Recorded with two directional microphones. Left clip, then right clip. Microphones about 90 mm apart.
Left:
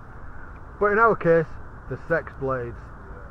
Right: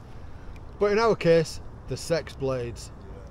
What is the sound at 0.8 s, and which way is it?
Speech, 30° right (ahead or behind).